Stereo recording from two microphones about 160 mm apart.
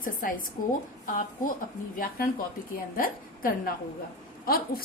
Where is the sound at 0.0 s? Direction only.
60° left (ahead or behind).